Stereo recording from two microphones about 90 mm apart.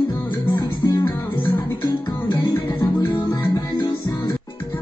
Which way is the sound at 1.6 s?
30° left (ahead or behind).